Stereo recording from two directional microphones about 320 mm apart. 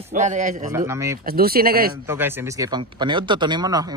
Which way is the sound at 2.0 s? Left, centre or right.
Centre.